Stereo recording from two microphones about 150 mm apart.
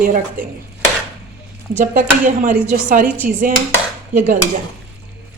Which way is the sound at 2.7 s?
70° right (ahead or behind).